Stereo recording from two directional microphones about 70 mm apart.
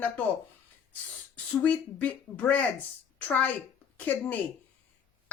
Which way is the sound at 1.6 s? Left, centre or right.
Left.